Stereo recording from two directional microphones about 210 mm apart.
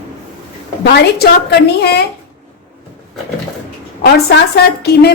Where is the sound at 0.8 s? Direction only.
50° left (ahead or behind).